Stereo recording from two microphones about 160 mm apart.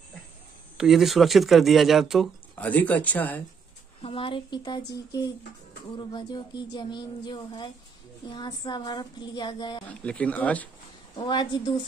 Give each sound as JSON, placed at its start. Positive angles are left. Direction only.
{"t": 0.7, "sound": "speech", "side_deg": 0}
{"t": 2.5, "sound": "speech", "side_deg": 10}
{"t": 4.0, "sound": "speech", "side_deg": 35}
{"t": 9.8, "sound": "speech", "side_deg": 10}
{"t": 11.1, "sound": "speech", "side_deg": 30}